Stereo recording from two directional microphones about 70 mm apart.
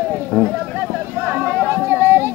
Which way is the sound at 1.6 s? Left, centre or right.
Right.